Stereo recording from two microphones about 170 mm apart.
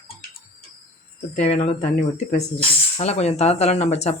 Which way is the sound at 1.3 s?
40° left (ahead or behind).